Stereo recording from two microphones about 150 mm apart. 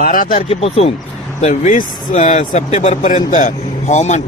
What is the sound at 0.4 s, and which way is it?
Speech, 40° left (ahead or behind).